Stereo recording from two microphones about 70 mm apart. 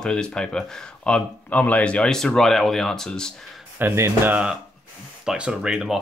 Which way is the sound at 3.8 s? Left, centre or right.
Right.